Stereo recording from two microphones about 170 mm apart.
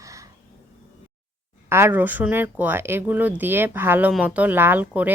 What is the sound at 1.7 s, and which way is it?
A woman's voice, 15° right (ahead or behind).